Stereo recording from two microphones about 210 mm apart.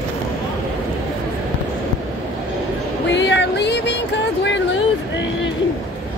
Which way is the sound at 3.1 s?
55° left (ahead or behind).